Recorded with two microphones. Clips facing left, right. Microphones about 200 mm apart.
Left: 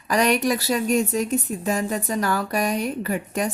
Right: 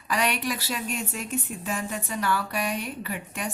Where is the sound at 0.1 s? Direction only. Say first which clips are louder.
Left 7 dB; 40° left (ahead or behind).